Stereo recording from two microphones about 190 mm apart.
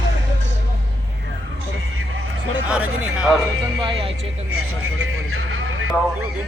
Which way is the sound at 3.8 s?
25° right (ahead or behind).